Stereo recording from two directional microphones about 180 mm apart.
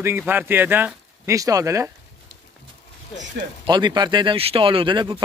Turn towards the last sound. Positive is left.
turn(degrees=-25)  # may be behind; listen again after turning